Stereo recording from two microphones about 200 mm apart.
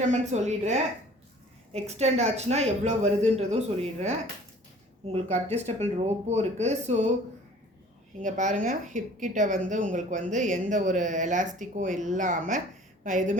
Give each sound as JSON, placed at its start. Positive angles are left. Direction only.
{"t": 0.0, "sound": "a woman's voice", "side_deg": -35}
{"t": 5.1, "sound": "a woman's voice", "side_deg": -35}
{"t": 8.2, "sound": "a woman's voice", "side_deg": -40}